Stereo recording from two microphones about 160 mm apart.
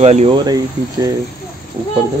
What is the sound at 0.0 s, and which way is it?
Speech, 45° right (ahead or behind).